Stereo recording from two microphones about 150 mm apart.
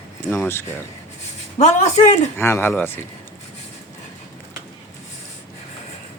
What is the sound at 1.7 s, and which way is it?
Speech, 50° left (ahead or behind).